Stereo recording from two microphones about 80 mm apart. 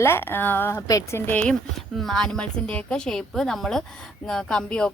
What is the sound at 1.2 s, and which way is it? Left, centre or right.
Speech, left.